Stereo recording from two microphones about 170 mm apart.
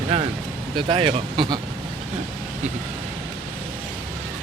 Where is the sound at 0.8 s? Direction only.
30° right (ahead or behind).